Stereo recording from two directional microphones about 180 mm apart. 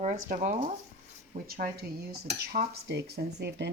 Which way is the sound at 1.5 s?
55° right (ahead or behind).